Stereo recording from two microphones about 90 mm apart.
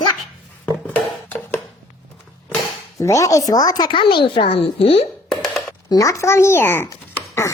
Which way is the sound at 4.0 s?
70° left (ahead or behind).